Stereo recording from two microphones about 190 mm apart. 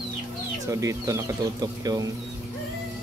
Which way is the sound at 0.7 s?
15° right (ahead or behind).